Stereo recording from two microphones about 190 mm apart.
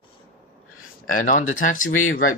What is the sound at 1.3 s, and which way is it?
Speech, 40° left (ahead or behind).